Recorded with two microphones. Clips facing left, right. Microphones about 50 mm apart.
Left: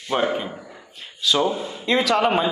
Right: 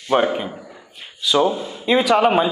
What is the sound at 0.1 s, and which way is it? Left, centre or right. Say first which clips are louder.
Speech: right 4 dB; centre.